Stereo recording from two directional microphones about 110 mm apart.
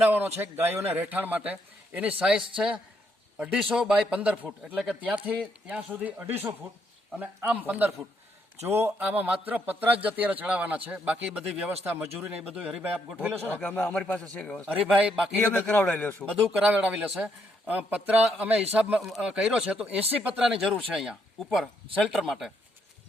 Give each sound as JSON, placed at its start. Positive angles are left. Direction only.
{"t": 0.0, "sound": "a man's voice", "side_deg": -15}
{"t": 9.0, "sound": "a man's voice", "side_deg": -10}
{"t": 13.4, "sound": "speech", "side_deg": 15}
{"t": 14.8, "sound": "a man's voice", "side_deg": -10}
{"t": 15.4, "sound": "speech", "side_deg": 15}
{"t": 16.5, "sound": "a man's voice", "side_deg": -10}